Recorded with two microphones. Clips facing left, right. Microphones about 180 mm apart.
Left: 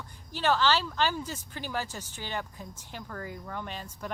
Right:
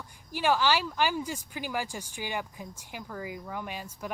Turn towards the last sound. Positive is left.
turn(degrees=-10)  # may be behind; listen again after turning